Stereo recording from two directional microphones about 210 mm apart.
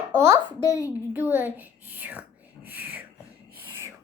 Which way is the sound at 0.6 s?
15° left (ahead or behind).